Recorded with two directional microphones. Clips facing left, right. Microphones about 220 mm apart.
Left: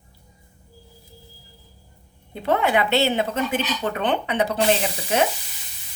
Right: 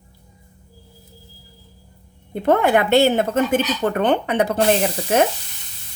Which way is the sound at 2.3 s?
50° right (ahead or behind).